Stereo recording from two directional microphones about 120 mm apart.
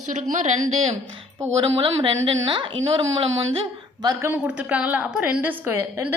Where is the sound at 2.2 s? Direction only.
45° right (ahead or behind).